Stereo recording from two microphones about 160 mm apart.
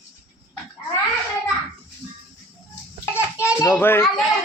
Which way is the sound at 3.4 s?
15° left (ahead or behind).